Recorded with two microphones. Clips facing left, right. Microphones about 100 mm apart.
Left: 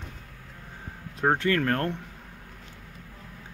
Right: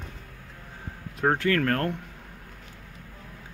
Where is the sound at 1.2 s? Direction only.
20° left (ahead or behind).